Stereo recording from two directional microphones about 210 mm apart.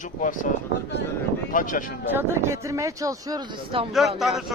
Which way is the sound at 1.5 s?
40° left (ahead or behind).